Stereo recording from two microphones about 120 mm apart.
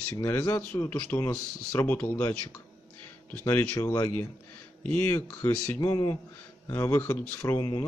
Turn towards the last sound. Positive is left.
turn(degrees=35)  # may be behind; listen again after turning